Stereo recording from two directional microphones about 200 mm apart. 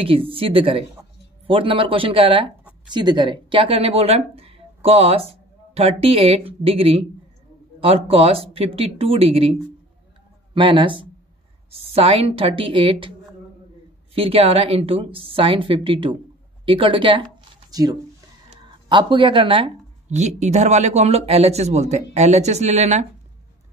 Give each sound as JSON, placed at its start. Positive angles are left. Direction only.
{"t": 0.0, "sound": "a woman's voice", "side_deg": -25}
{"t": 14.1, "sound": "a woman's voice", "side_deg": -30}
{"t": 17.6, "sound": "a sound", "side_deg": -20}
{"t": 18.9, "sound": "speech", "side_deg": -25}